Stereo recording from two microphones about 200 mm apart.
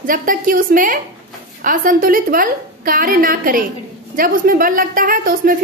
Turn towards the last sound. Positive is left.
turn(degrees=-45)  # may be behind; listen again after turning